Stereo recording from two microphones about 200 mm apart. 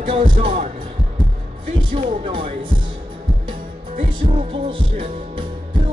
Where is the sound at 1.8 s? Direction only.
25° right (ahead or behind).